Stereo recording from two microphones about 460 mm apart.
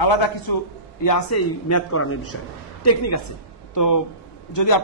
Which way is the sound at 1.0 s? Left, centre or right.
Left.